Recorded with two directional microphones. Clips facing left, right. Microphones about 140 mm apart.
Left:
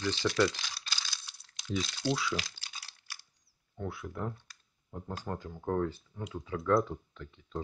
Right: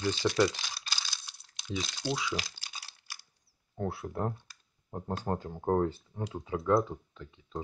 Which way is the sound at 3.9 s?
35° right (ahead or behind).